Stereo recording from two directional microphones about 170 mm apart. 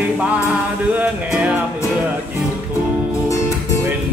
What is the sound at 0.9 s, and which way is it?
Music, 10° right (ahead or behind).